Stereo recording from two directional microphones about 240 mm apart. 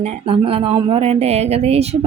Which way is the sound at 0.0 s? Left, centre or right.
Right.